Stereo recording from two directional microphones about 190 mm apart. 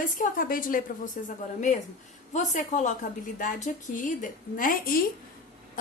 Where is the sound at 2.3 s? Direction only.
40° left (ahead or behind).